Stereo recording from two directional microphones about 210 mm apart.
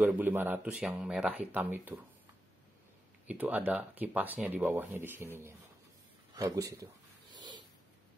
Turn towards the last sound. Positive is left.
turn(degrees=-20)  # may be behind; listen again after turning